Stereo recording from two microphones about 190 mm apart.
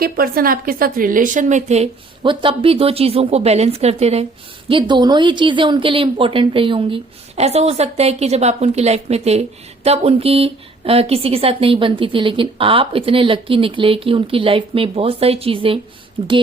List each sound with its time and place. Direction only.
0.0 s a woman's voice: 50° right (ahead or behind); by 4.3 s 35° right (ahead or behind)
4.7 s a woman's voice: 25° right (ahead or behind)